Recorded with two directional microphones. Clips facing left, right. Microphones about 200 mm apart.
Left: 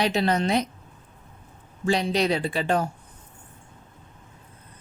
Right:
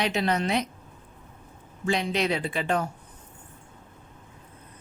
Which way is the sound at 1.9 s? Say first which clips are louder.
Left 3 dB; 35° left (ahead or behind).